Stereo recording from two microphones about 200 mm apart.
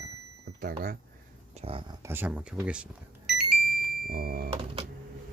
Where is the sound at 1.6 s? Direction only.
30° right (ahead or behind).